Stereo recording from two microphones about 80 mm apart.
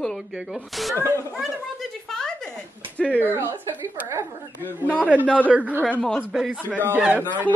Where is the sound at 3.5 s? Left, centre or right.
Right.